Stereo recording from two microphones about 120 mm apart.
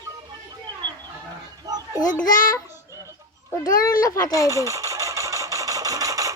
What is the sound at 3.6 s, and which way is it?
Speech, 30° left (ahead or behind).